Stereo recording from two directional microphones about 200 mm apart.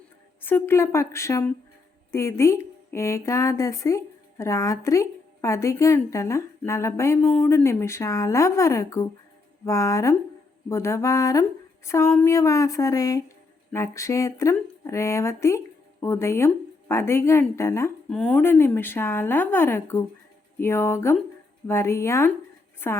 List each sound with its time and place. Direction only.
0.4 s speech: 10° left (ahead or behind)